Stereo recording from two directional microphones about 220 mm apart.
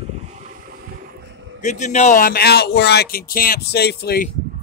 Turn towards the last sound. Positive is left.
turn(degrees=45)  # may be behind; listen again after turning